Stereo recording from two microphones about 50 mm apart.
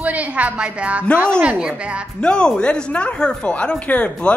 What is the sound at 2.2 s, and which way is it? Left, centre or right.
Speech, centre.